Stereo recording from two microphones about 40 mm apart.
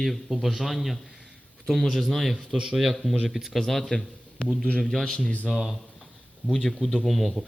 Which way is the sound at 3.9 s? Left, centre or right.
Left.